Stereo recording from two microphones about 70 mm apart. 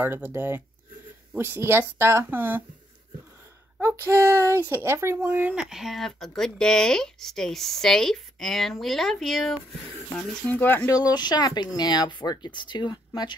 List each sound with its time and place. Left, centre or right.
0.0 s speech: right
4.0 s speech: right
5.2 s speech: right
5.5 s speech: centre
10.1 s speech: left
10.9 s speech: left